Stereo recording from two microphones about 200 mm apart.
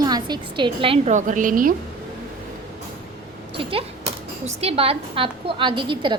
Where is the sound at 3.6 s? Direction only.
25° right (ahead or behind).